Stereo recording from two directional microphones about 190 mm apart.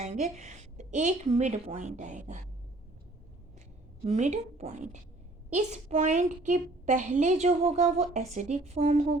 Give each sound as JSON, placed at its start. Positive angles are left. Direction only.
{"t": 0.0, "sound": "a woman's voice", "side_deg": -35}
{"t": 4.0, "sound": "a woman's voice", "side_deg": -35}